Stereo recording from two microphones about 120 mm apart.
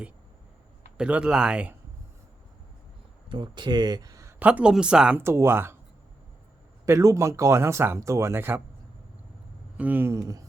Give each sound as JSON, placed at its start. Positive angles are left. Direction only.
{"t": 0.9, "sound": "speech", "side_deg": -10}
{"t": 3.2, "sound": "speech", "side_deg": -40}
{"t": 4.4, "sound": "speech", "side_deg": -10}
{"t": 5.2, "sound": "speech", "side_deg": -20}
{"t": 6.8, "sound": "speech", "side_deg": -25}
{"t": 9.7, "sound": "speech", "side_deg": -15}